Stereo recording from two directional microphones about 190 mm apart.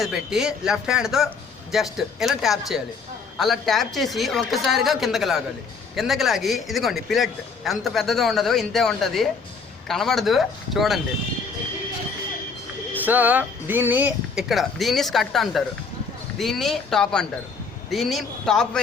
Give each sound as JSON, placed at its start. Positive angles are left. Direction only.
{"t": 0.0, "sound": "speech", "side_deg": 0}
{"t": 12.9, "sound": "speech", "side_deg": -10}